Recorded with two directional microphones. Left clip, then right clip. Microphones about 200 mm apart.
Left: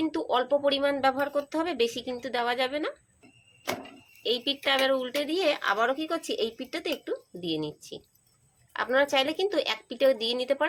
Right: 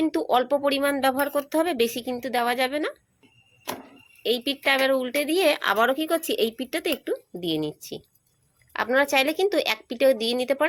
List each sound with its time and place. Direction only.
0.0 s speech: 35° right (ahead or behind)
4.2 s speech: 35° right (ahead or behind)